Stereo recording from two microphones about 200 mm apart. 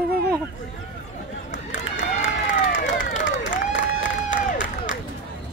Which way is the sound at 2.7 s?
40° left (ahead or behind).